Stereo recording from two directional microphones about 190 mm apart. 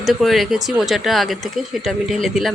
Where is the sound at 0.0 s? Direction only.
Centre (ahead or behind).